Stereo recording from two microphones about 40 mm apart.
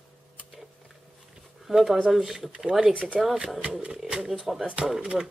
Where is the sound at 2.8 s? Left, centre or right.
Right.